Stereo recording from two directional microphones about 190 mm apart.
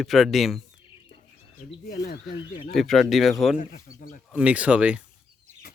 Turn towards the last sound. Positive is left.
turn(degrees=-5)  # may be behind; listen again after turning